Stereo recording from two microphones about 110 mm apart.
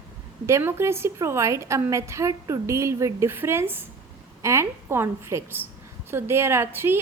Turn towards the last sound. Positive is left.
turn(degrees=-20)  # may be behind; listen again after turning